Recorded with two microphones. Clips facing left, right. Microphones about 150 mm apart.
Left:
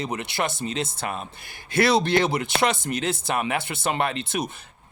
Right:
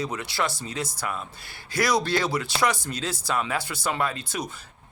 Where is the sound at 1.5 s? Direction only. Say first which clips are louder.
Left 5 dB; 60° left (ahead or behind).